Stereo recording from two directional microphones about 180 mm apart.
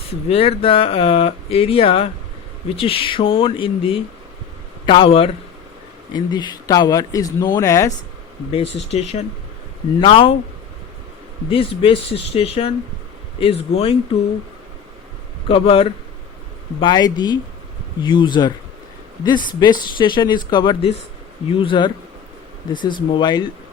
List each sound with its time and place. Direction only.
0.3 s speech: 30° left (ahead or behind); by 7.9 s 15° left (ahead or behind)
8.5 s speech: 35° left (ahead or behind)
11.4 s speech: 30° left (ahead or behind)
15.4 s speech: 30° left (ahead or behind)